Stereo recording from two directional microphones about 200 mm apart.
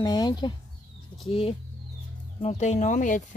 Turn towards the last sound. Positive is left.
turn(degrees=40)  # may be behind; listen again after turning